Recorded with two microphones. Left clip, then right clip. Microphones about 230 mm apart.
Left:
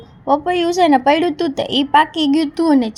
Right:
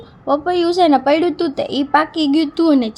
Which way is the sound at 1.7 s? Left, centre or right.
Centre.